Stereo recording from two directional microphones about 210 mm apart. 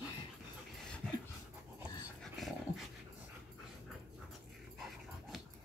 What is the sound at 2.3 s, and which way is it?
Dog, centre (ahead or behind).